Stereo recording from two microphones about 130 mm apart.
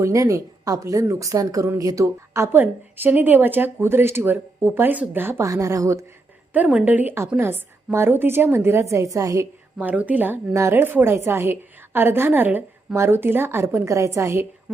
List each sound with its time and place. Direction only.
0.0 s a woman's voice: 25° right (ahead or behind)
6.5 s a woman's voice: 10° right (ahead or behind)
9.7 s a woman's voice: 10° right (ahead or behind)